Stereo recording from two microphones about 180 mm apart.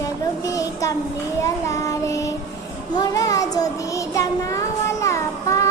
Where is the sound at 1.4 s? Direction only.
15° left (ahead or behind).